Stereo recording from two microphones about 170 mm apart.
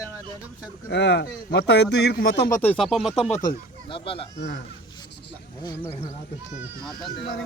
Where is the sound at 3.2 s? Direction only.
45° left (ahead or behind).